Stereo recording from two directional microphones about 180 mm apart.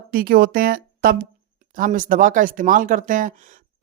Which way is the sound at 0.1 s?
55° right (ahead or behind).